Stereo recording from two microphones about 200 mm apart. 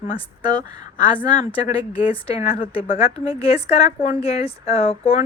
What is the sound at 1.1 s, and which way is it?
Speech, 10° left (ahead or behind).